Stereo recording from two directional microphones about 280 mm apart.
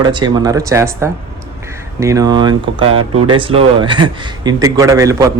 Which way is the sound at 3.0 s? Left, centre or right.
Right.